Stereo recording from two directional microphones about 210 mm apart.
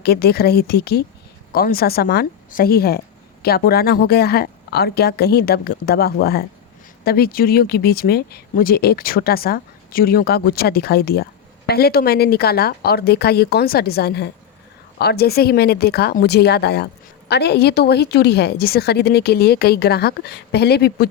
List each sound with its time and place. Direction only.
0.0 s speech: 50° left (ahead or behind)